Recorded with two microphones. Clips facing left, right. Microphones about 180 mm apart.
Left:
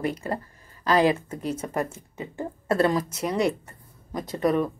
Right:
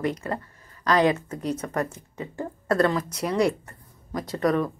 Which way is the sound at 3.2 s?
Centre (ahead or behind).